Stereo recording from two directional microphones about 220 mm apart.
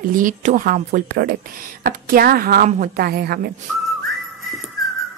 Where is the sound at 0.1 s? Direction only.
35° right (ahead or behind).